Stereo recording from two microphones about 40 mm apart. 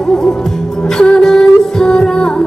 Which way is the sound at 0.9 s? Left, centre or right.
Centre.